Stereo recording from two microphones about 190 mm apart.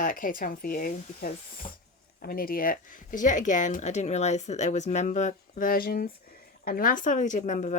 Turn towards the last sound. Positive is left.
turn(degrees=40)  # may be behind; listen again after turning